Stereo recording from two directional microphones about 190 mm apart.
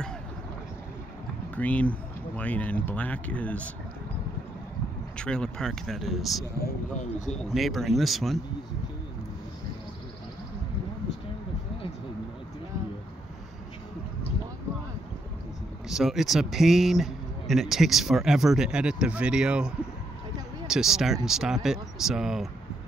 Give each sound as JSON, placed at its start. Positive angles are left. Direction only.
{"t": 1.5, "sound": "speech", "side_deg": 5}
{"t": 5.1, "sound": "speech", "side_deg": 5}
{"t": 7.0, "sound": "speech", "side_deg": 40}
{"t": 7.4, "sound": "speech", "side_deg": 0}
{"t": 15.9, "sound": "speech", "side_deg": 0}